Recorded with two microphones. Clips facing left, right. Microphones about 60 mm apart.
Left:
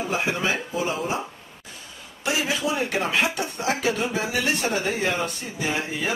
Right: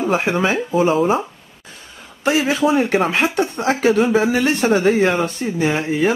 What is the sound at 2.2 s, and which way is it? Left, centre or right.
Speech, right.